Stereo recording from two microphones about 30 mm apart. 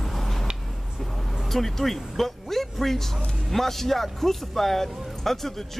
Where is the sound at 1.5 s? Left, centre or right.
Centre.